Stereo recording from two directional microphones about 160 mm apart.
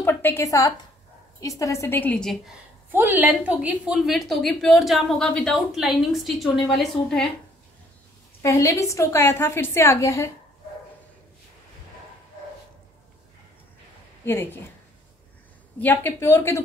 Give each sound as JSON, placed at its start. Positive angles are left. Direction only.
{"t": 0.0, "sound": "a woman's voice", "side_deg": 15}
{"t": 2.9, "sound": "a woman's voice", "side_deg": -10}
{"t": 8.4, "sound": "a woman's voice", "side_deg": 20}
{"t": 14.2, "sound": "a woman's voice", "side_deg": 15}
{"t": 15.8, "sound": "a woman's voice", "side_deg": 10}